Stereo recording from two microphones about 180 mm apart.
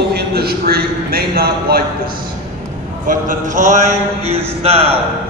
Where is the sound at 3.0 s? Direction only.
45° right (ahead or behind).